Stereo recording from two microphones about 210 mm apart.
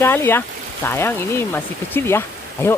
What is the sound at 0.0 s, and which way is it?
Speech, 10° left (ahead or behind).